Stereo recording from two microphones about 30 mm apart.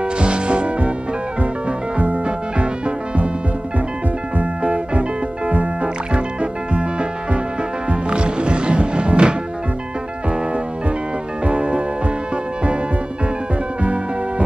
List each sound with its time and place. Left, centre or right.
0.2 s music: right
2.0 s music: right
4.4 s music: right
6.1 s music: right
8.1 s music: right
11.4 s music: right